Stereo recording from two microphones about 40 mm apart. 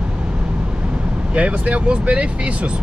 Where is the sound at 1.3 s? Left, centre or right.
Right.